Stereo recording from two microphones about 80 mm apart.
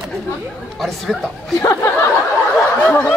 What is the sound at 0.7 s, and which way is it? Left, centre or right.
Chopping, centre.